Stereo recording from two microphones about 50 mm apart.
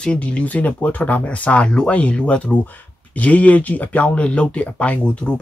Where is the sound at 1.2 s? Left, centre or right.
Left.